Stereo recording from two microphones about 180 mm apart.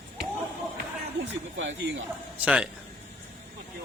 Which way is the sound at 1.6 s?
90° right.